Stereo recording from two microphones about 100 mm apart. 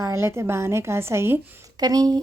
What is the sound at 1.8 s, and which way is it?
Speech, 40° right (ahead or behind).